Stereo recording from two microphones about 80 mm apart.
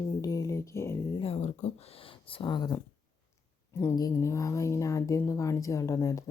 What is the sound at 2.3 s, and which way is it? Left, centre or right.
Speech, left.